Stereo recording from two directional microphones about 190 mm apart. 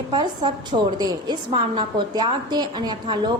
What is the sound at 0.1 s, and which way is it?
A woman's voice, 25° right (ahead or behind).